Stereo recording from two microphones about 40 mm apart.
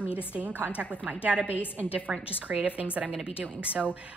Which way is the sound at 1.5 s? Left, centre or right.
Left.